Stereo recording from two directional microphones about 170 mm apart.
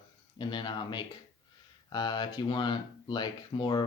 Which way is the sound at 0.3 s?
25° left (ahead or behind).